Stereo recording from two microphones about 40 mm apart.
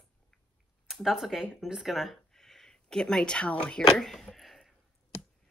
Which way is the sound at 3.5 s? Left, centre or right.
Left.